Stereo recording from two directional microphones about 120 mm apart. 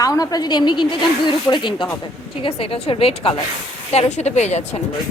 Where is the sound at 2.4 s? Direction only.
50° left (ahead or behind).